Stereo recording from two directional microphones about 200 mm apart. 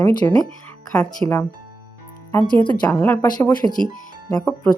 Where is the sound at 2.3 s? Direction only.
15° left (ahead or behind).